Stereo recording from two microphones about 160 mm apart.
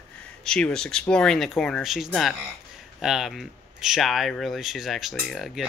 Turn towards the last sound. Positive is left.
turn(degrees=0)  # may be behind; listen again after turning